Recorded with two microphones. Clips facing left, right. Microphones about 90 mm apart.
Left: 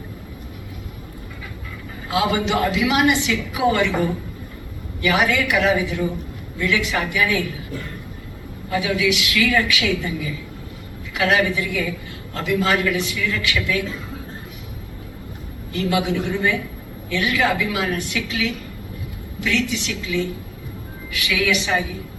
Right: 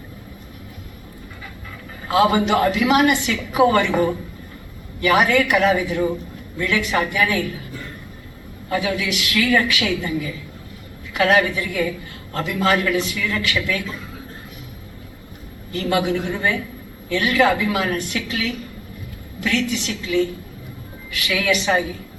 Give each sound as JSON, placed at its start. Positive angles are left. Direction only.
{"t": 2.0, "sound": "a woman's voice", "side_deg": -45}
{"t": 8.7, "sound": "a woman's voice", "side_deg": -40}
{"t": 15.7, "sound": "a woman's voice", "side_deg": -45}